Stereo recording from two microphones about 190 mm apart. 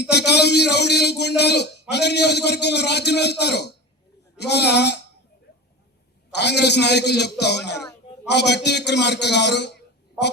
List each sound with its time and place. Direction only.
0.1 s a man's voice: 60° left (ahead or behind)
6.3 s a man's voice: 60° left (ahead or behind)